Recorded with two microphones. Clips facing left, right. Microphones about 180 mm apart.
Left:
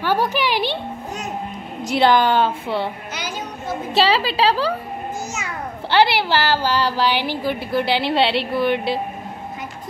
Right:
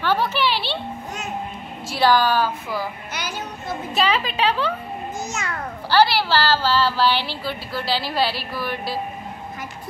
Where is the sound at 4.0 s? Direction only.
30° left (ahead or behind).